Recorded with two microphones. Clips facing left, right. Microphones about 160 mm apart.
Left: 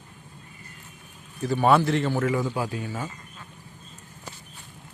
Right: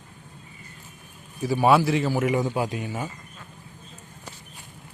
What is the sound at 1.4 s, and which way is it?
Speech, 10° right (ahead or behind).